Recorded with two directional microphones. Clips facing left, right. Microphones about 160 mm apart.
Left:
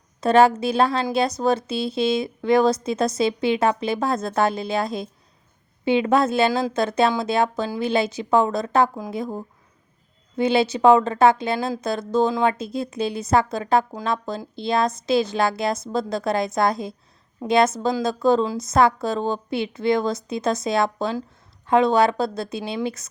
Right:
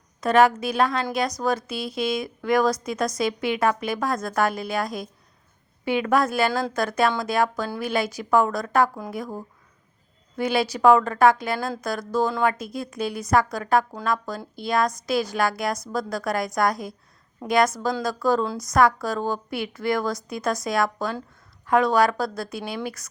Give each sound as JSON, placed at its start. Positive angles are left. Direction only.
{"t": 0.2, "sound": "speech", "side_deg": 30}